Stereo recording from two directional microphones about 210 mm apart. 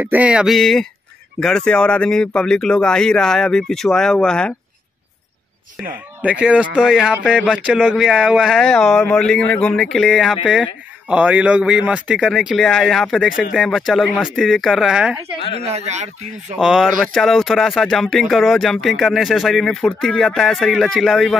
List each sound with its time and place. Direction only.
0.0 s speech: 5° right (ahead or behind)
6.2 s speech: 5° right (ahead or behind)
15.5 s speech: 30° right (ahead or behind)
16.5 s speech: centre (ahead or behind)